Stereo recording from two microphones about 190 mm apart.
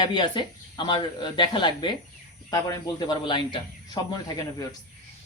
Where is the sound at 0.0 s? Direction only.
25° left (ahead or behind).